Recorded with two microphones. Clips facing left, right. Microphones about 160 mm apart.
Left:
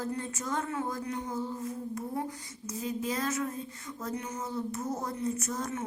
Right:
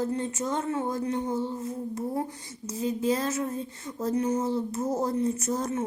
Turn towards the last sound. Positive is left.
turn(degrees=-30)  # may be behind; listen again after turning